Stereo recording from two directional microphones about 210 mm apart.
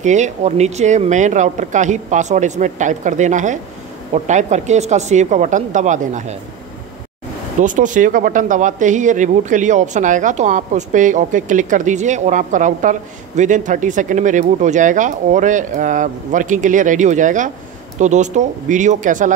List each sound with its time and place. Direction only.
0.0 s speech: 35° right (ahead or behind)
7.6 s speech: 35° right (ahead or behind)